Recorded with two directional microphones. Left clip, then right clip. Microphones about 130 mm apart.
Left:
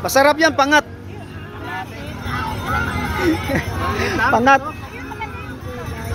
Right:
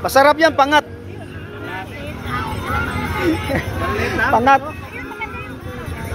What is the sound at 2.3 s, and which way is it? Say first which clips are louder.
Music: even; 45° left (ahead or behind).